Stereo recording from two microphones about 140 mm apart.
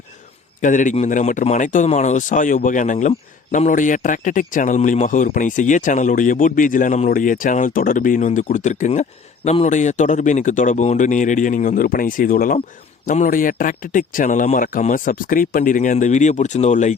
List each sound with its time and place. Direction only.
0.6 s a man's voice: 65° left (ahead or behind)